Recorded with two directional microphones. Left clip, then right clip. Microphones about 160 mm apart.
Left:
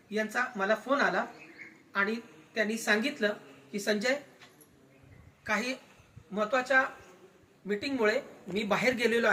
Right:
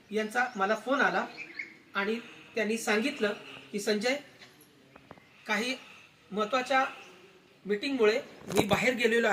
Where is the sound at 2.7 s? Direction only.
15° left (ahead or behind).